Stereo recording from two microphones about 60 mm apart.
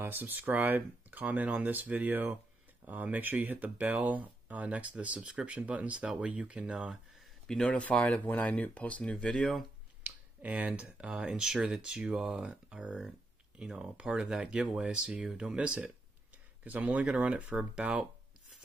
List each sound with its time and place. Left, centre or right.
0.0 s speech: right; by 7.0 s centre
7.2 s speech: centre
10.0 s speech: right